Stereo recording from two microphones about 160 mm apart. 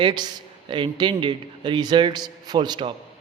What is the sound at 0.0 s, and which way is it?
A man's voice, 25° right (ahead or behind).